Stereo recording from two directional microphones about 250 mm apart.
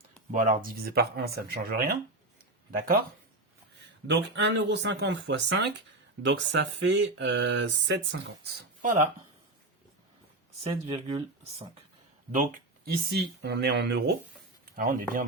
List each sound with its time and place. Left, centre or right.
0.3 s speech: right
4.0 s speech: right
8.8 s speech: right
10.6 s speech: right
12.3 s speech: right